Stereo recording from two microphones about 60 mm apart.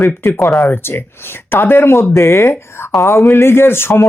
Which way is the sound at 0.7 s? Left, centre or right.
Left.